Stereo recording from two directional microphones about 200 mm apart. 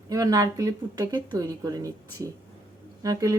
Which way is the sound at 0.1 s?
20° right (ahead or behind).